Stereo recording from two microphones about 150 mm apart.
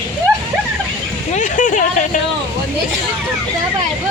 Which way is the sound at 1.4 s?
55° left (ahead or behind).